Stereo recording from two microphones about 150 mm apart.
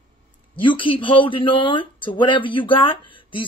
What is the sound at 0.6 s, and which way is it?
Speech, 35° left (ahead or behind).